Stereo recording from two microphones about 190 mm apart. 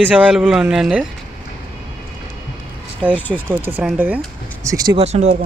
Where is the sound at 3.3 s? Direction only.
10° right (ahead or behind).